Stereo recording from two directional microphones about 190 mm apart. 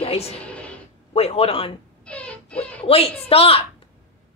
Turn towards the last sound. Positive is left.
turn(degrees=30)  # may be behind; listen again after turning